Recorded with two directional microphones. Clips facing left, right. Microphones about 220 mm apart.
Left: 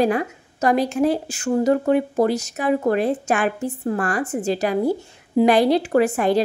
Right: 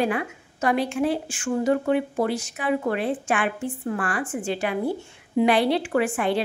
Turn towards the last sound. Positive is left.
turn(degrees=40)  # may be behind; listen again after turning